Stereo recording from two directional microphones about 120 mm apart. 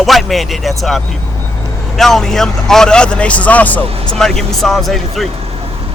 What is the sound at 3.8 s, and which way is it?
Speech, 55° right (ahead or behind).